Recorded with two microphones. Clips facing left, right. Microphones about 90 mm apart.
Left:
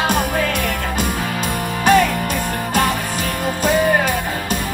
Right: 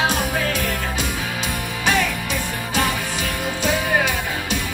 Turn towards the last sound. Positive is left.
turn(degrees=45)  # may be behind; listen again after turning